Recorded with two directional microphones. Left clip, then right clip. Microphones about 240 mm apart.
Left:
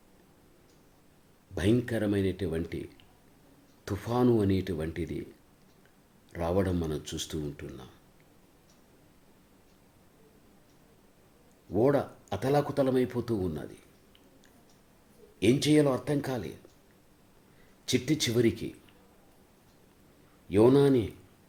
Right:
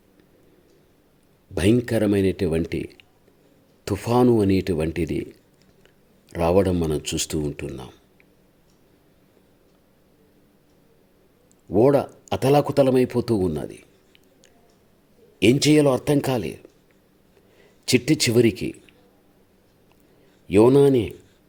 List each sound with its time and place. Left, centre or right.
1.5 s speech: right
6.3 s speech: right
11.7 s speech: right
17.8 s speech: right
20.5 s speech: right